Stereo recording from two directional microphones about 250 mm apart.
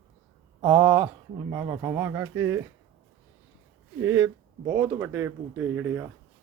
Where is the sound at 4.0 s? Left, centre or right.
Centre.